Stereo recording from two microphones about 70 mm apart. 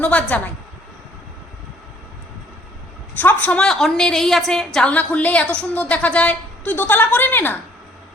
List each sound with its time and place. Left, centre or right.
0.0 s a woman's voice: centre
3.2 s a woman's voice: left
3.6 s a woman's voice: centre
4.9 s a woman's voice: centre